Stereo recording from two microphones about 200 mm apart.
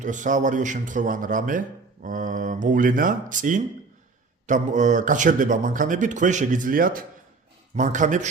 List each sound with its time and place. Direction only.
0.0 s a man's voice: 40° right (ahead or behind)